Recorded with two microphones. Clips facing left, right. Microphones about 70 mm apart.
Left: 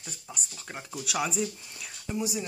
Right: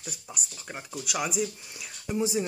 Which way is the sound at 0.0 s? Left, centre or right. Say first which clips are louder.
Right 2 dB; centre.